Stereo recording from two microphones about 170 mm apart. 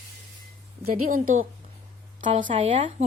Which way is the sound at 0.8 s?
55° right (ahead or behind).